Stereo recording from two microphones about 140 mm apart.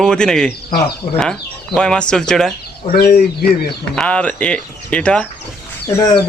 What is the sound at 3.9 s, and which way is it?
Speech, 10° left (ahead or behind).